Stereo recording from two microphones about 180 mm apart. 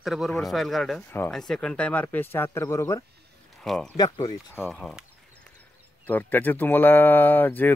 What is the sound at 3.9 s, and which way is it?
Speech, 20° left (ahead or behind).